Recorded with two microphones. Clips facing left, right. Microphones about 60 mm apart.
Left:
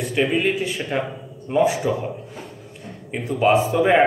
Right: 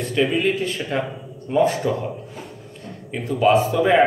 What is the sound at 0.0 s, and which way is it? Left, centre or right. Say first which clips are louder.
Speech: even; centre.